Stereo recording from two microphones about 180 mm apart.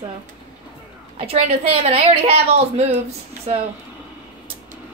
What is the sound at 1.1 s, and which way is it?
A woman's voice, 30° right (ahead or behind).